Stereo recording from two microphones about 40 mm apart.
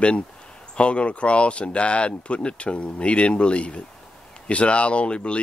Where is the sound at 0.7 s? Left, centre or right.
Left.